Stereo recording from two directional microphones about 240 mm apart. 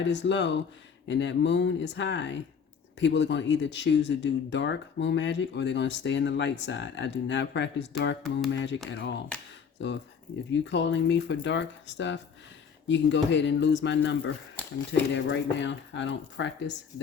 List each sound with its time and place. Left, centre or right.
0.0 s speech: left